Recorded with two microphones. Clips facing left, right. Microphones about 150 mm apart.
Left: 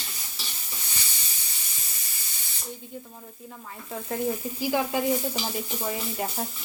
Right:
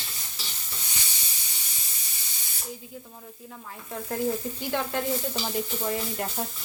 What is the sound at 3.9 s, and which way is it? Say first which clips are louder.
Sizzle: even; centre (ahead or behind).